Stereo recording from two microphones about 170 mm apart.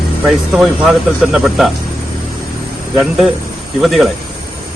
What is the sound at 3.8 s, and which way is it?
Speech, centre (ahead or behind).